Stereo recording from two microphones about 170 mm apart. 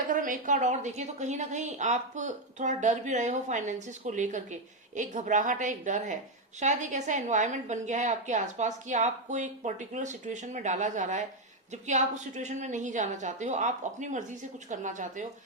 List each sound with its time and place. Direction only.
0.1 s a woman's voice: 50° right (ahead or behind)